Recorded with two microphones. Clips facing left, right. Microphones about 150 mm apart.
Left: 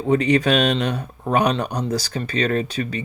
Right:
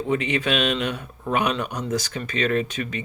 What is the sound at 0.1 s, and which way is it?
Speech, 40° left (ahead or behind).